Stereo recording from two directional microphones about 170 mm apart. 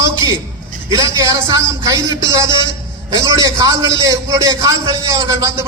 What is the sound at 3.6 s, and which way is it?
A man's voice, 20° right (ahead or behind).